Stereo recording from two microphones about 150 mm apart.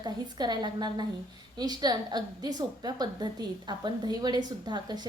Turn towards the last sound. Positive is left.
turn(degrees=-30)  # may be behind; listen again after turning